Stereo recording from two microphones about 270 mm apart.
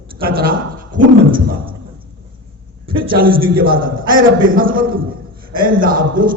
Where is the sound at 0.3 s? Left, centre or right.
Right.